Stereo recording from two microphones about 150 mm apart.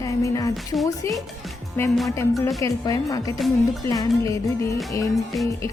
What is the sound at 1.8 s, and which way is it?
Music, 15° left (ahead or behind).